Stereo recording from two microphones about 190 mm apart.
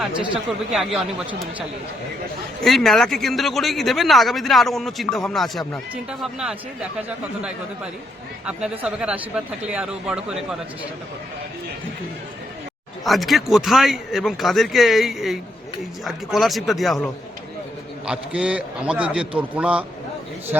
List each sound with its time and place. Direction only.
0.7 s speech: centre (ahead or behind)
2.6 s speech: centre (ahead or behind)
8.8 s speech: 5° right (ahead or behind)
13.1 s a man's voice: centre (ahead or behind)